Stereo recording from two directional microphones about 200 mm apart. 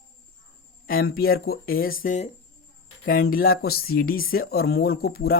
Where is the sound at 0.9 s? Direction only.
50° left (ahead or behind).